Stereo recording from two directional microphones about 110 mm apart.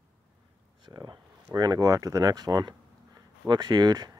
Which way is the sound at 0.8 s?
40° right (ahead or behind).